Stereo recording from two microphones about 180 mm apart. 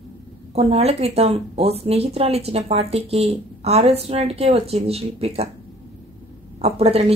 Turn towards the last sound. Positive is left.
turn(degrees=-35)  # may be behind; listen again after turning